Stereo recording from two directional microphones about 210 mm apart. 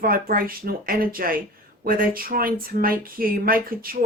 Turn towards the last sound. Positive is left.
turn(degrees=-45)  # may be behind; listen again after turning